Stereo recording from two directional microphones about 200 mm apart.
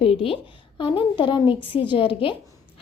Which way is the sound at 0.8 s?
25° left (ahead or behind).